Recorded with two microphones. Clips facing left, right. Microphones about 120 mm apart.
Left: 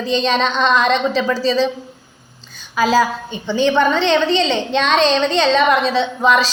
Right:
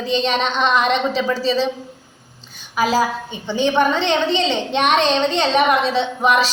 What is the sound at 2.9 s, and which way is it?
A woman's voice, 75° left (ahead or behind).